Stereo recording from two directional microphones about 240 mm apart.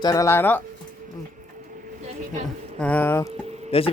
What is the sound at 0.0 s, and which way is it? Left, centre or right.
Speech, centre.